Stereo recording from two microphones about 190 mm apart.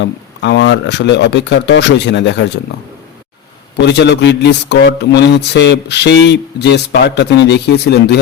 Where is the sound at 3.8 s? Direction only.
65° left (ahead or behind).